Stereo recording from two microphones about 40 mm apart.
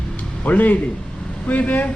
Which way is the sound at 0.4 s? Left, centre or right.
Left.